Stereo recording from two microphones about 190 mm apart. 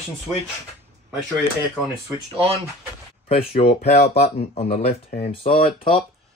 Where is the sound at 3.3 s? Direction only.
30° left (ahead or behind).